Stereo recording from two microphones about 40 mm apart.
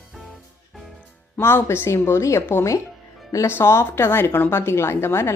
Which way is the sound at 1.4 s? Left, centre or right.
Left.